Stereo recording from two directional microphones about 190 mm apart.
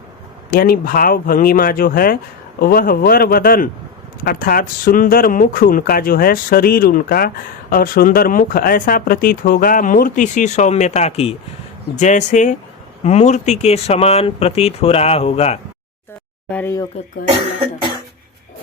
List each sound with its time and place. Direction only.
0.5 s speech: 50° left (ahead or behind); by 15.5 s 35° left (ahead or behind)
16.5 s speech: 10° left (ahead or behind)